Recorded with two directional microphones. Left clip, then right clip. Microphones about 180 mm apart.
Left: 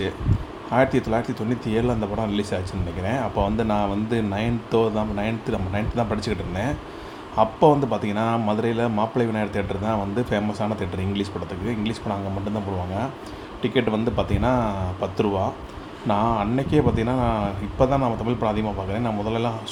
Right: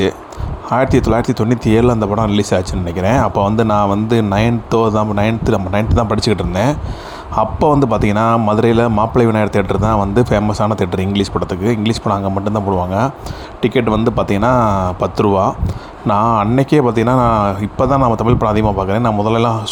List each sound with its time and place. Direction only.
0.7 s speech: 45° right (ahead or behind)